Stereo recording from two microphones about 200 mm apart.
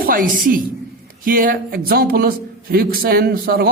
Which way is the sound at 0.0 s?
45° right (ahead or behind).